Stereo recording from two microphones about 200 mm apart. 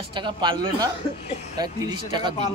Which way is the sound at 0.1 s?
25° right (ahead or behind).